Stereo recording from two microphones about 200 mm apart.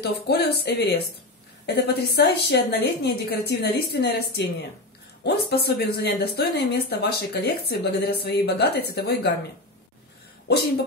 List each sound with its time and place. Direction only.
0.0 s a woman's voice: 55° left (ahead or behind)